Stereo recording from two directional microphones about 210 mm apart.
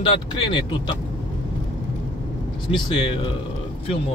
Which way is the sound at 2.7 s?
25° left (ahead or behind).